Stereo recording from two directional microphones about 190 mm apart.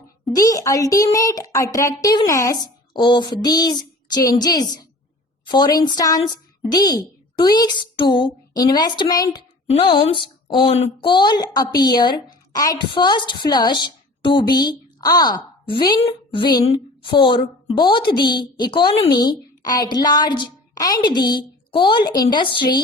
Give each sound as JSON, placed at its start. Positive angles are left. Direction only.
{"t": 0.3, "sound": "a woman's voice", "side_deg": 20}